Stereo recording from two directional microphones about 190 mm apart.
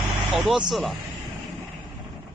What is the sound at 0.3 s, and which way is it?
Speech, centre (ahead or behind).